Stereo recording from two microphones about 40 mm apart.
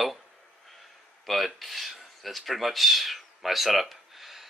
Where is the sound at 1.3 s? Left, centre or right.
Centre.